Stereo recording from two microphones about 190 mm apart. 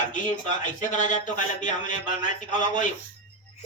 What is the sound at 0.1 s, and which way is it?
A man's voice, 40° left (ahead or behind).